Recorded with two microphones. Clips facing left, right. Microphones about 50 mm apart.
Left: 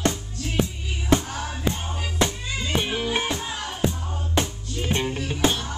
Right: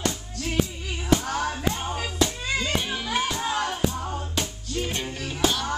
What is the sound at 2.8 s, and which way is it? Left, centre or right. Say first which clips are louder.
Music: left 2 dB; left.